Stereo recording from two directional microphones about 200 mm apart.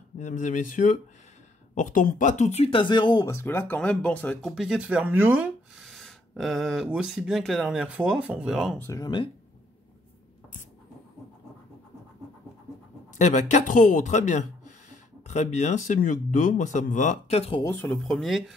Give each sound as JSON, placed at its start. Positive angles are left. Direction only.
{"t": 0.2, "sound": "speech", "side_deg": 40}
{"t": 8.7, "sound": "speech", "side_deg": 15}
{"t": 13.2, "sound": "speech", "side_deg": 35}
{"t": 17.6, "sound": "speech", "side_deg": 10}